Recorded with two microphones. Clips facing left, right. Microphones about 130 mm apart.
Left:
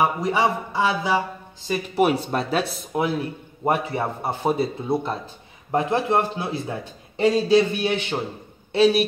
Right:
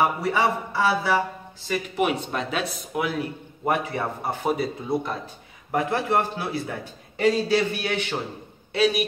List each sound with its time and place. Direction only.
0.0 s speech: 15° left (ahead or behind)
2.0 s speech: 35° left (ahead or behind)